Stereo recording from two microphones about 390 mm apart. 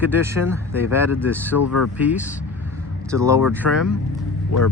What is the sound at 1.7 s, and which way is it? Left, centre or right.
Speech, left.